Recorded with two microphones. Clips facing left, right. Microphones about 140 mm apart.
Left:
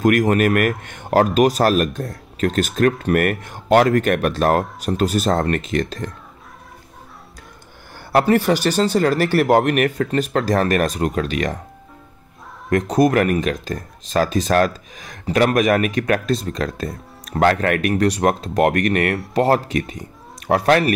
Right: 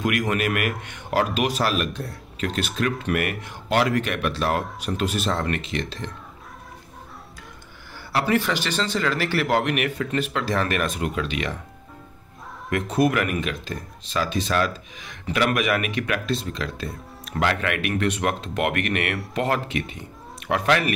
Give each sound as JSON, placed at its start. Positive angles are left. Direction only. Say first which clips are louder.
{"t": 0.0, "sound": "speech", "louder": "left 8 dB", "side_deg": 45}
{"t": 7.9, "sound": "speech", "louder": "left 7 dB", "side_deg": 45}
{"t": 12.6, "sound": "speech", "louder": "left 5 dB", "side_deg": 40}